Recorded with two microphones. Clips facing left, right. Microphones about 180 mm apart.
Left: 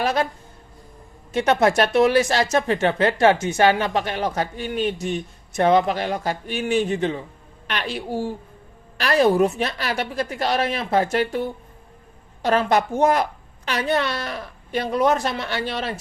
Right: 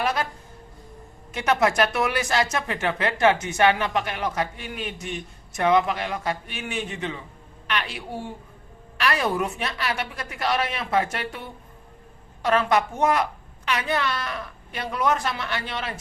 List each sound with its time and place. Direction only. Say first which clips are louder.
1.3 s speech: left 4 dB; 30° left (ahead or behind)